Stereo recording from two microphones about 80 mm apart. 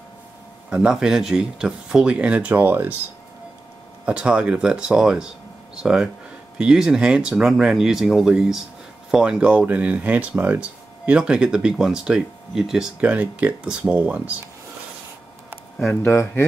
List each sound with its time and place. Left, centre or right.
0.7 s speech: centre
4.0 s speech: centre
13.1 s speech: centre
15.9 s speech: left